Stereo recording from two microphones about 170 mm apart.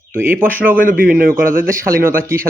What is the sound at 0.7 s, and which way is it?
Speech, 55° right (ahead or behind).